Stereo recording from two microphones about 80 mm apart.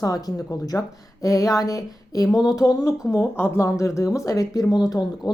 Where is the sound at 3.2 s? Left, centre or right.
Left.